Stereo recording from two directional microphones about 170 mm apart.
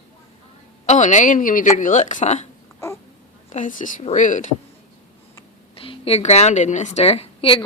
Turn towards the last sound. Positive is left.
turn(degrees=30)  # may be behind; listen again after turning